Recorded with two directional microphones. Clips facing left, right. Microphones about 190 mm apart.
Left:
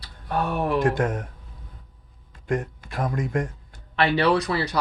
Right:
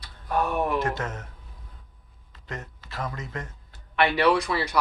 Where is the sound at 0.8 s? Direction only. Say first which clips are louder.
Left 7 dB; 50° left (ahead or behind).